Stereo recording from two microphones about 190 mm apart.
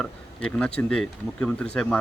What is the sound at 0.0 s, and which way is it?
Speech, 5° left (ahead or behind).